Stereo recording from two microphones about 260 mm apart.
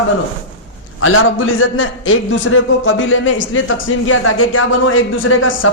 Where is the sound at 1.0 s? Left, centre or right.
Left.